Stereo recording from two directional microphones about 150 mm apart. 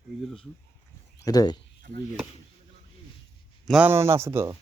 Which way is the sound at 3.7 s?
10° right (ahead or behind).